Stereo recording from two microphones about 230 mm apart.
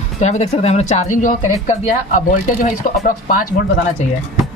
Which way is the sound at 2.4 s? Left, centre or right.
Left.